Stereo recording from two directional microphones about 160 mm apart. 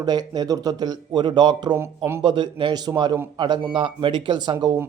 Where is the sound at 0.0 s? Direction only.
25° right (ahead or behind).